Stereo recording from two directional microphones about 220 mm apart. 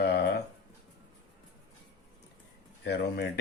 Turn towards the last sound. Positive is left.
turn(degrees=50)  # may be behind; listen again after turning